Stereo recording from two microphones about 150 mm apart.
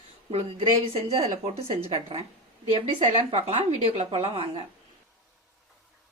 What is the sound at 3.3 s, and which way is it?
A woman's voice, 40° right (ahead or behind).